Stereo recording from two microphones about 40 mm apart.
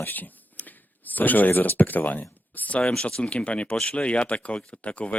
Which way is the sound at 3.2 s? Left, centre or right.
Left.